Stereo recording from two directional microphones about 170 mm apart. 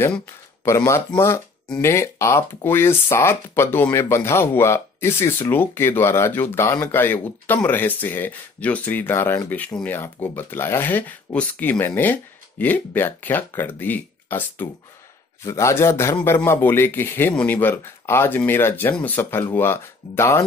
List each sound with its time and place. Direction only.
0.0 s speech: 15° left (ahead or behind)